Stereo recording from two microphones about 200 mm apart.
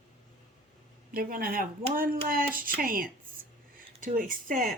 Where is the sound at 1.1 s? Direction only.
45° right (ahead or behind).